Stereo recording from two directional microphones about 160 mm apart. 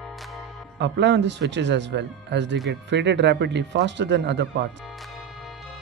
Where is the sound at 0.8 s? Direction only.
90° right.